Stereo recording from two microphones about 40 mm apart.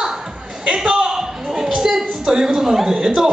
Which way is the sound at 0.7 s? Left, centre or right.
Centre.